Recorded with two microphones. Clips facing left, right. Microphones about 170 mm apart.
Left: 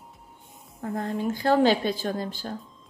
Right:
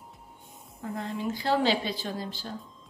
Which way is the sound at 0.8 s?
45° left (ahead or behind).